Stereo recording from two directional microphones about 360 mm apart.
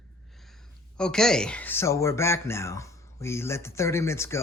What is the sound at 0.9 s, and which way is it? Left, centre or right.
Speech, centre.